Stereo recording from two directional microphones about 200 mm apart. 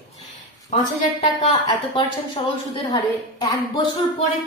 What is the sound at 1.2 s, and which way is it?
A woman's voice, 30° left (ahead or behind).